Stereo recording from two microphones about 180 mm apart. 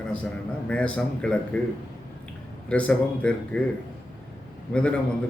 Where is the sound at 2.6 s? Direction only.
5° left (ahead or behind).